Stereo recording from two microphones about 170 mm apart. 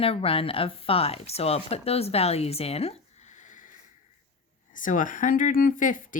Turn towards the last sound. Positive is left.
turn(degrees=50)  # may be behind; listen again after turning